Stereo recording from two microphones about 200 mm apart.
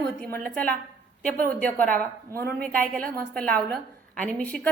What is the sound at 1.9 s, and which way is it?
Speech, 50° right (ahead or behind).